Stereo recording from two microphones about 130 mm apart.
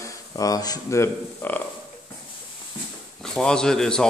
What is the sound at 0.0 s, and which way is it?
Speech, 25° left (ahead or behind).